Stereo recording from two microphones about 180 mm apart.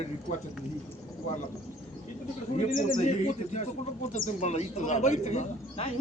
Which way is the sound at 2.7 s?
50° left (ahead or behind).